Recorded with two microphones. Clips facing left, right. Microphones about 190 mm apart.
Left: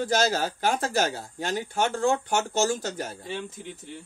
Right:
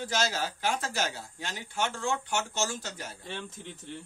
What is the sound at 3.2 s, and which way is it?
Speech, 5° left (ahead or behind).